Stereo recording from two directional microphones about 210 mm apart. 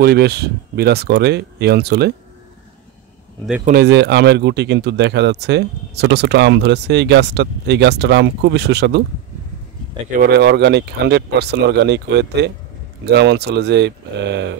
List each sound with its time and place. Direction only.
0.0 s speech: 50° right (ahead or behind)
3.6 s speech: 50° right (ahead or behind)
10.1 s speech: 50° right (ahead or behind)